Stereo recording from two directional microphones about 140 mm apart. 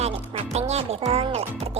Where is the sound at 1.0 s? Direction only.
40° right (ahead or behind).